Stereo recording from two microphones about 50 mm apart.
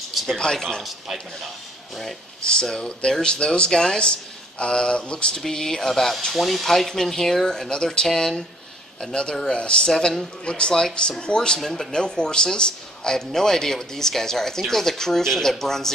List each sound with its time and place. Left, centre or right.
0.3 s speech: centre
0.8 s speech: centre
2.4 s speech: centre
5.3 s speech: centre